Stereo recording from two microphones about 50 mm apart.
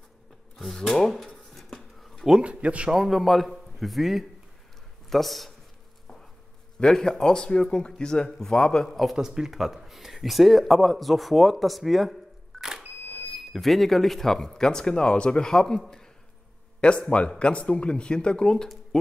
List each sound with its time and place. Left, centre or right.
0.6 s a sound: centre
2.4 s speech: right
2.9 s a man's voice: centre
6.8 s speech: centre
8.9 s speech: centre
16.8 s speech: centre